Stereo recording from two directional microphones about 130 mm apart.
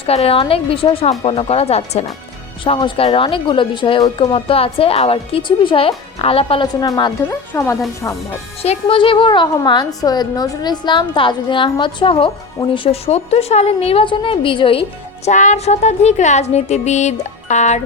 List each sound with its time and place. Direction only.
0.0 s a woman's voice: 50° left (ahead or behind)
2.6 s a woman's voice: 40° left (ahead or behind)
6.7 s a woman's voice: 30° left (ahead or behind)
8.6 s a woman's voice: 50° left (ahead or behind)
15.3 s speech: 70° left (ahead or behind)